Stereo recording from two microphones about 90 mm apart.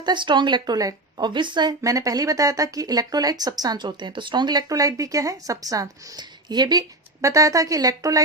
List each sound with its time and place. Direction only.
0.0 s speech: 60° right (ahead or behind); by 1.2 s 45° right (ahead or behind)
1.2 s speech: 60° right (ahead or behind)
1.8 s speech: 40° right (ahead or behind); by 4.6 s 55° right (ahead or behind)
4.7 s a woman's voice: 40° right (ahead or behind)
7.2 s a woman's voice: 35° right (ahead or behind)